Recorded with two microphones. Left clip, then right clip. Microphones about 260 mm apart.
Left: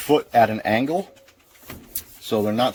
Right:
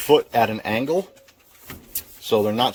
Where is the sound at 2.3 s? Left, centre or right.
Centre.